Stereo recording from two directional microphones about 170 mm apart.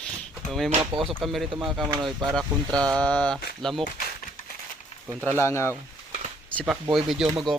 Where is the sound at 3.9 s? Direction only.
50° left (ahead or behind).